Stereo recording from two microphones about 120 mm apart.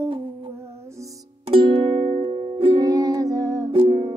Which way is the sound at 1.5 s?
50° right (ahead or behind).